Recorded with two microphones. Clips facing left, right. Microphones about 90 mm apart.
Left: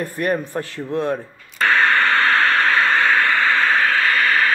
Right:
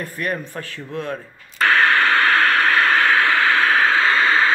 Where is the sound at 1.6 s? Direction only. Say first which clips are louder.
Even; 5° right (ahead or behind).